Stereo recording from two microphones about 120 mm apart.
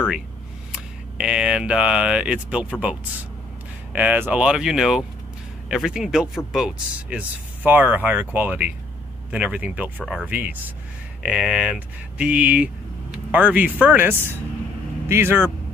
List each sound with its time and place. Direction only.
0.7 s speech: 5° right (ahead or behind)
3.9 s speech: 15° right (ahead or behind)